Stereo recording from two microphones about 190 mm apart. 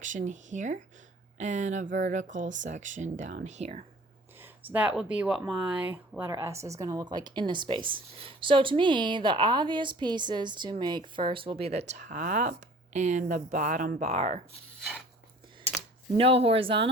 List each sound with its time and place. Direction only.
0.0 s speech: 40° right (ahead or behind)
4.4 s speech: 10° right (ahead or behind); by 14.4 s 35° right (ahead or behind)
16.1 s speech: 30° right (ahead or behind)